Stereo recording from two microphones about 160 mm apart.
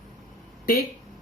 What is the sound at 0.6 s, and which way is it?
Speech, 70° left (ahead or behind).